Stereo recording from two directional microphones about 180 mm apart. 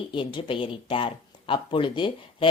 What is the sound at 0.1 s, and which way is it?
Speech, 25° left (ahead or behind).